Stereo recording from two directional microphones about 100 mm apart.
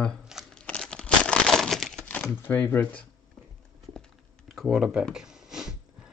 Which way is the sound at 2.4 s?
20° left (ahead or behind).